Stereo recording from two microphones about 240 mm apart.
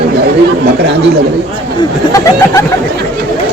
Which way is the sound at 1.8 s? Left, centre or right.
Centre.